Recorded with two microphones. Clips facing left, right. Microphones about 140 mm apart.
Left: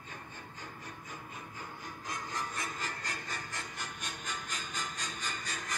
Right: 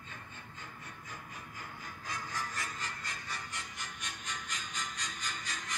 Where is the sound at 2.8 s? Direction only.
45° left (ahead or behind).